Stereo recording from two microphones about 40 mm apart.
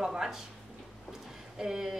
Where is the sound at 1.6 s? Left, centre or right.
Centre.